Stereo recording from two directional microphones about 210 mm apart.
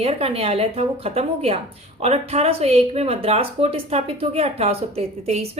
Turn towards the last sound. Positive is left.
turn(degrees=-30)  # may be behind; listen again after turning